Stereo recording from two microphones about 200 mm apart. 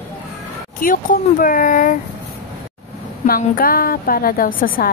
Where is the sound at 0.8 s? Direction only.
45° left (ahead or behind).